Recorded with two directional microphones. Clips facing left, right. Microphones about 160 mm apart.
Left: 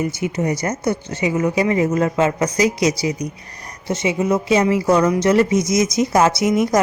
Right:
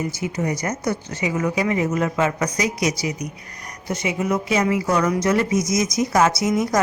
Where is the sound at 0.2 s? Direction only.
25° left (ahead or behind).